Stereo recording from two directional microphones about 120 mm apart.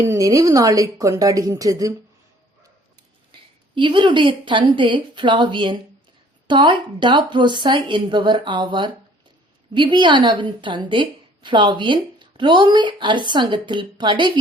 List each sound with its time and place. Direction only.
0.1 s a woman's voice: 30° right (ahead or behind)
3.8 s a woman's voice: 40° right (ahead or behind)